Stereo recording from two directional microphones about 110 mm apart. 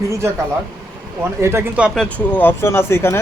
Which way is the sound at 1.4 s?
25° right (ahead or behind).